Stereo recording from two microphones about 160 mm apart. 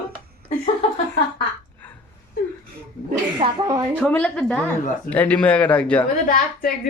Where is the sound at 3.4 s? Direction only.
25° right (ahead or behind).